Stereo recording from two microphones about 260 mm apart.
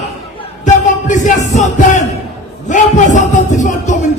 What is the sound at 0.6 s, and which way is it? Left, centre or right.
Music, left.